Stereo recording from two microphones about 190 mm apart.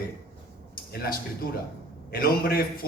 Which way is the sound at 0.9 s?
50° left (ahead or behind).